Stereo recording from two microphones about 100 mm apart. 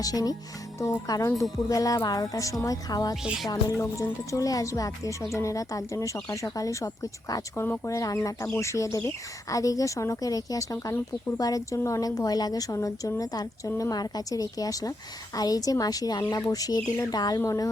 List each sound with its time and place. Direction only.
0.0 s speech: 40° left (ahead or behind)
3.2 s speech: 5° right (ahead or behind)
3.5 s speech: 30° left (ahead or behind)
13.7 s a woman's voice: 30° left (ahead or behind)
13.9 s speech: 40° left (ahead or behind)